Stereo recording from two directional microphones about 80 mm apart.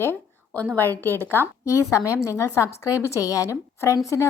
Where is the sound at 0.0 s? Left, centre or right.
Left.